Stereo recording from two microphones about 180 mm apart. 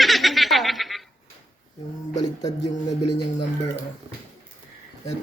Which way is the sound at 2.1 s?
20° left (ahead or behind).